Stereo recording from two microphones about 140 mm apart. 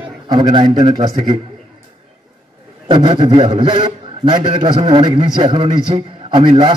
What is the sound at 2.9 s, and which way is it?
A man's voice, 35° right (ahead or behind).